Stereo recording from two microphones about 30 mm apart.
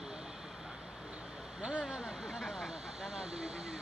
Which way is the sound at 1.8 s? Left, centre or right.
Right.